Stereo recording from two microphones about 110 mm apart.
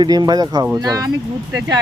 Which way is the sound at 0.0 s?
40° right (ahead or behind).